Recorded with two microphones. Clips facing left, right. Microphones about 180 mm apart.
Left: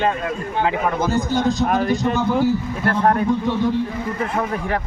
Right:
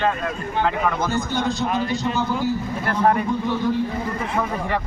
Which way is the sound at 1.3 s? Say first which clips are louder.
Left 5 dB; 50° left (ahead or behind).